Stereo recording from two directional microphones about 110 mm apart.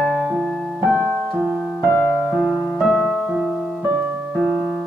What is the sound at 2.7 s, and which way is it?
Music, 5° right (ahead or behind).